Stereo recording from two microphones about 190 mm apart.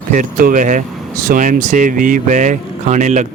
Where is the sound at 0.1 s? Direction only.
45° right (ahead or behind).